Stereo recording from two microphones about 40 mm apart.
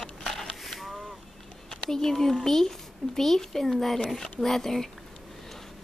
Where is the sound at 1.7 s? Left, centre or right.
Centre.